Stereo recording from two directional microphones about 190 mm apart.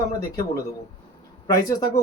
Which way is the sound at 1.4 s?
20° left (ahead or behind).